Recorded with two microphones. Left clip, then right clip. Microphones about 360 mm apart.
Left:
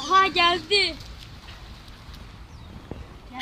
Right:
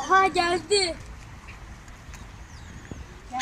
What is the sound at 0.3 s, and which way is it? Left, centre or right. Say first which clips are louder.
Speech: left 3 dB; right.